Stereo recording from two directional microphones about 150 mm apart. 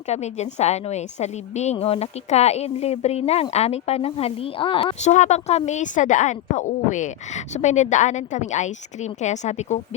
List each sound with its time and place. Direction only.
0.1 s speech: 45° left (ahead or behind)
5.0 s speech: 50° left (ahead or behind)